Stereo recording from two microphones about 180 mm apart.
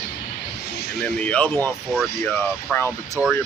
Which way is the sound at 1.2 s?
10° left (ahead or behind).